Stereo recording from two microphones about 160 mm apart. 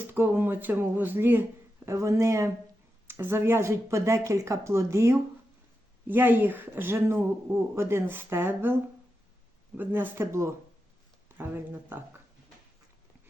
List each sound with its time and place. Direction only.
0.1 s speech: 15° right (ahead or behind)